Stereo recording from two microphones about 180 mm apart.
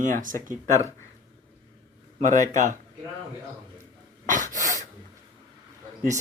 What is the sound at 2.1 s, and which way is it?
Speech, 45° right (ahead or behind).